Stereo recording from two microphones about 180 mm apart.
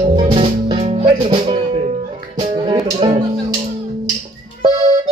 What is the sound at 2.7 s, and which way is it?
Music, 30° right (ahead or behind).